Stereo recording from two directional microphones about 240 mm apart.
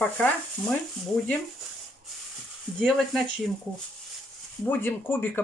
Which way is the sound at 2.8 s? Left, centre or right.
Centre.